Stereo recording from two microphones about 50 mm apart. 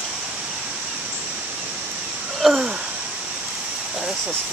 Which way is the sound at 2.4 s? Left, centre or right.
Centre.